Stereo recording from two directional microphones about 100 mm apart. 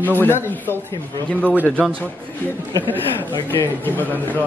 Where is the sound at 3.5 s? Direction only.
20° left (ahead or behind).